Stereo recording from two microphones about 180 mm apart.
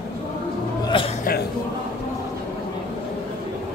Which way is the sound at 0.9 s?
30° left (ahead or behind).